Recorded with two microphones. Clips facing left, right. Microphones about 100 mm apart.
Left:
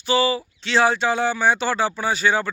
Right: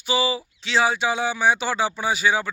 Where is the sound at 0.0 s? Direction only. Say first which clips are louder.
Left 3 dB; 10° right (ahead or behind).